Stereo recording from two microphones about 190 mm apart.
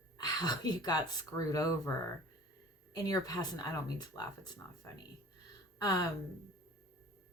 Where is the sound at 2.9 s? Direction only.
20° left (ahead or behind).